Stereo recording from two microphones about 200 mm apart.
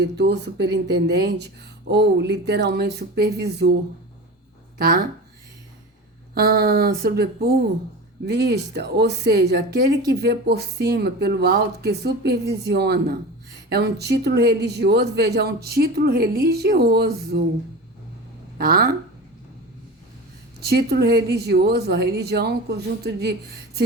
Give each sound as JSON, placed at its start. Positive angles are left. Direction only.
{"t": 0.0, "sound": "a woman's voice", "side_deg": -55}
{"t": 4.8, "sound": "a woman's voice", "side_deg": -50}
{"t": 6.3, "sound": "a woman's voice", "side_deg": -50}
{"t": 18.5, "sound": "speech", "side_deg": -50}
{"t": 20.6, "sound": "a woman's voice", "side_deg": -55}